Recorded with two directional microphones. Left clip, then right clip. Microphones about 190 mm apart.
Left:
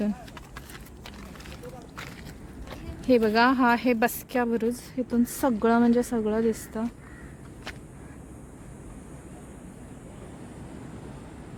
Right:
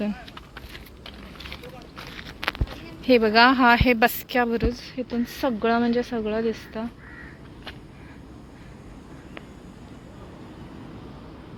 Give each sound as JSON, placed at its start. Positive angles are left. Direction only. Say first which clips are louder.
{"t": 3.1, "sound": "a woman's voice", "louder": "right 4 dB", "side_deg": 5}
{"t": 4.7, "sound": "a woman's voice", "louder": "even", "side_deg": 25}